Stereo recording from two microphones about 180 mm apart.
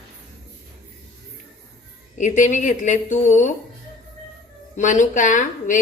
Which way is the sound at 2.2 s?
45° left (ahead or behind).